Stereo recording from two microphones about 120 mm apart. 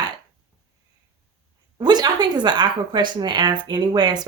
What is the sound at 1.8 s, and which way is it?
A woman's voice, 35° right (ahead or behind).